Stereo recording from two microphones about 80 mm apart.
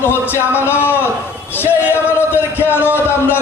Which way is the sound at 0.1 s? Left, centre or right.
Left.